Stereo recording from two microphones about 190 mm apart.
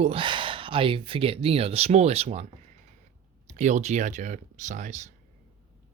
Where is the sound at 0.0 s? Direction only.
30° right (ahead or behind).